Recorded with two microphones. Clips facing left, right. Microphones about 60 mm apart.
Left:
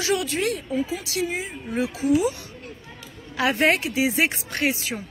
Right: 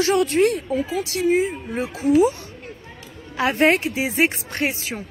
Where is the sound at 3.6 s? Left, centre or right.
Right.